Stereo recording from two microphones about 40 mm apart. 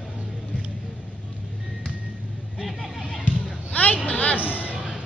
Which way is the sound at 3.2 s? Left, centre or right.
Left.